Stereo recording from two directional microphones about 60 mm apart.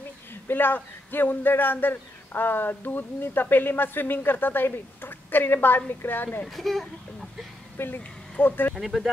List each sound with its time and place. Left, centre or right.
0.3 s a man's voice: left
6.4 s speech: centre
7.7 s speech: left
8.7 s speech: centre